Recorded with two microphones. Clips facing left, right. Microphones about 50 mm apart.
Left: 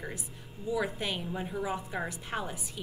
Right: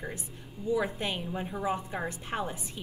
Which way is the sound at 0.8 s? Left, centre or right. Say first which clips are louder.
Right 1 dB; right.